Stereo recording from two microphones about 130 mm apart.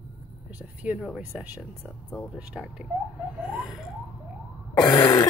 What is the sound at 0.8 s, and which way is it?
Speech, centre (ahead or behind).